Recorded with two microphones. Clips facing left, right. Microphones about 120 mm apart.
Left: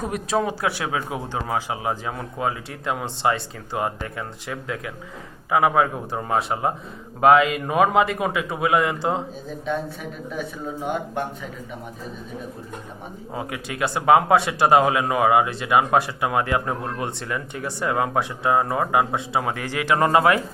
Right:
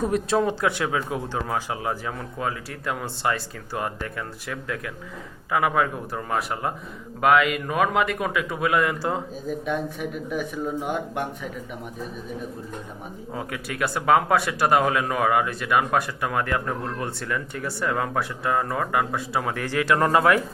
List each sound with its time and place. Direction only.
0.0 s speech: centre (ahead or behind)
0.8 s speech: 15° left (ahead or behind)
9.5 s a man's voice: 10° right (ahead or behind)
13.3 s speech: 20° left (ahead or behind)